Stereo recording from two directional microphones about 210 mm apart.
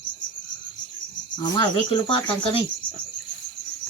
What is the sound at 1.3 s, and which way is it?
Speech, 20° left (ahead or behind).